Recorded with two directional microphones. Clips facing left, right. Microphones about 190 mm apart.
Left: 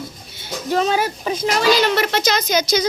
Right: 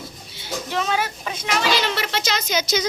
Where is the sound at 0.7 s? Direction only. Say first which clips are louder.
Left 6 dB; 35° left (ahead or behind).